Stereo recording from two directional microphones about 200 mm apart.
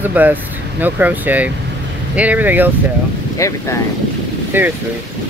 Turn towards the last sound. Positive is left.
turn(degrees=-10)  # may be behind; listen again after turning